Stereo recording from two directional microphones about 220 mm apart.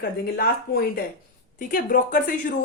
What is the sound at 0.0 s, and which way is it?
A woman's voice, 45° left (ahead or behind).